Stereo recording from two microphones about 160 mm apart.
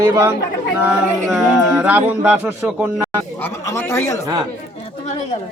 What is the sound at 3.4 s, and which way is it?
Speech, 15° left (ahead or behind).